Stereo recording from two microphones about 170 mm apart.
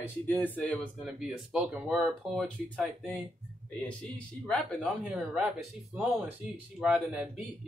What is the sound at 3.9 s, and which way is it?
A man's voice, 5° left (ahead or behind).